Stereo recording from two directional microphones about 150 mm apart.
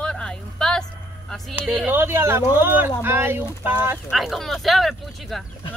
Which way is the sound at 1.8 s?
15° right (ahead or behind).